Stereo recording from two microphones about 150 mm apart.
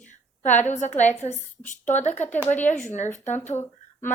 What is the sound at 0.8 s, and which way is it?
A woman's voice, 50° left (ahead or behind).